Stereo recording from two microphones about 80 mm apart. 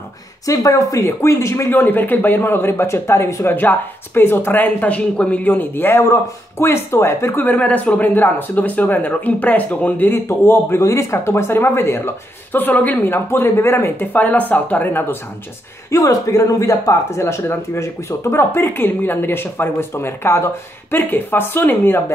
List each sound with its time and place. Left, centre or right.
0.5 s speech: left
1.8 s speech: left
3.5 s speech: left
15.9 s speech: left